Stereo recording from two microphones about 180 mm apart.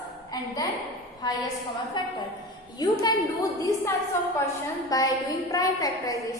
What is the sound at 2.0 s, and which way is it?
A woman's voice, 25° left (ahead or behind).